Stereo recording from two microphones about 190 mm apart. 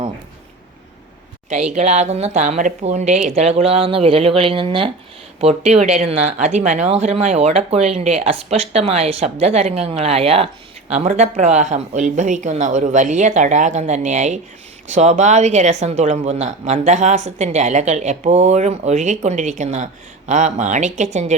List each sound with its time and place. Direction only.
1.7 s speech: 35° right (ahead or behind)